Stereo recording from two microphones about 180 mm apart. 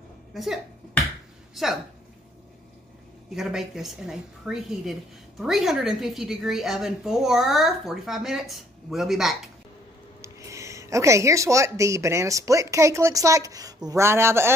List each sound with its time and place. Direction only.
0.3 s speech: centre (ahead or behind)
3.3 s a woman's voice: centre (ahead or behind)
10.2 s speech: 15° right (ahead or behind)